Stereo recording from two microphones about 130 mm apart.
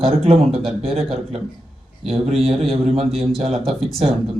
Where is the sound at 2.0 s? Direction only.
Centre (ahead or behind).